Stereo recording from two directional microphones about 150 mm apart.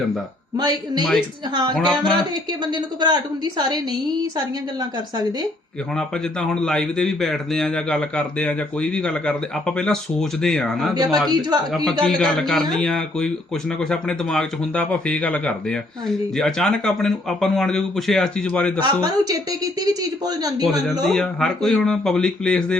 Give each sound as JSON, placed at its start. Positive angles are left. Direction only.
{"t": 0.5, "sound": "a woman's voice", "side_deg": -30}
{"t": 5.9, "sound": "speech", "side_deg": 5}
{"t": 10.9, "sound": "a woman's voice", "side_deg": -30}
{"t": 12.0, "sound": "speech", "side_deg": 0}
{"t": 18.8, "sound": "a woman's voice", "side_deg": -25}
{"t": 21.1, "sound": "speech", "side_deg": 5}